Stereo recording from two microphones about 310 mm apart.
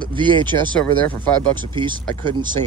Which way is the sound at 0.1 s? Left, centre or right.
Centre.